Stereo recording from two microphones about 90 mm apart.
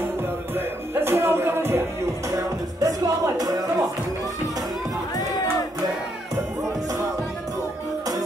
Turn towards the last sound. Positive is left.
turn(degrees=-40)  # may be behind; listen again after turning